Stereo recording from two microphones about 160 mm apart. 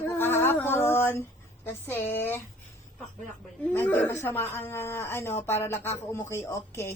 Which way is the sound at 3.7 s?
10° left (ahead or behind).